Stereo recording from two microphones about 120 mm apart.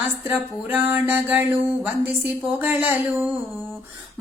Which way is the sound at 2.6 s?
15° right (ahead or behind).